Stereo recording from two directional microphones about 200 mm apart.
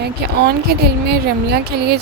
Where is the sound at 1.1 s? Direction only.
55° right (ahead or behind).